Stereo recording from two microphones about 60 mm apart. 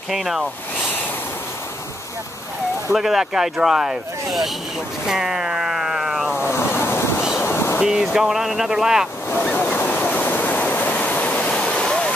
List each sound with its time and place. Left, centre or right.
0.1 s speech: centre
3.0 s speech: centre
5.0 s ocean: centre
6.4 s waves: left
7.4 s a sound: left
7.8 s speech: centre
9.6 s waves: left